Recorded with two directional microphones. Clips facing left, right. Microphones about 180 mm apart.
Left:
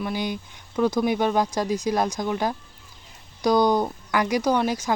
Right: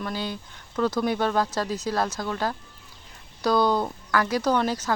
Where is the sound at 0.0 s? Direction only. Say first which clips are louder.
Left 3 dB; 15° left (ahead or behind).